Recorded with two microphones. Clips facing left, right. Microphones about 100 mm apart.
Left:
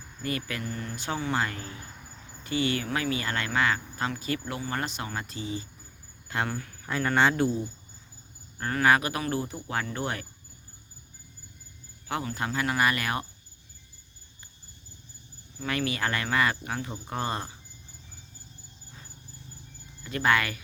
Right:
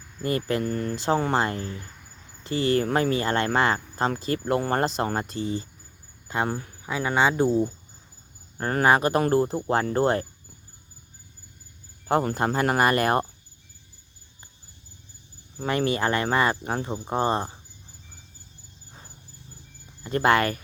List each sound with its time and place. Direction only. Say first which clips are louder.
0.2 s speech: right 8 dB; 35° right (ahead or behind)
6.2 s speech: right 4 dB; 20° right (ahead or behind)
6.8 s speech: right 1 dB; 10° right (ahead or behind)
7.4 s speech: right 6 dB; 40° right (ahead or behind)
12.0 s speech: right 8 dB; 45° right (ahead or behind)
15.6 s speech: right 6 dB; 30° right (ahead or behind)
20.1 s speech: right 5 dB; 40° right (ahead or behind)